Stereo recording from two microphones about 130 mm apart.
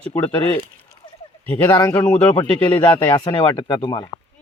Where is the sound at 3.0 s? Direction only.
30° left (ahead or behind).